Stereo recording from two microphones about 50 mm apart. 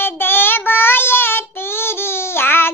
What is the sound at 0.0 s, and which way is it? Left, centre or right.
Child singing, left.